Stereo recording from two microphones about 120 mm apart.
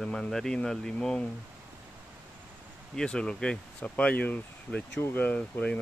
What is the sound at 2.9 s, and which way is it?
Speech, 5° left (ahead or behind).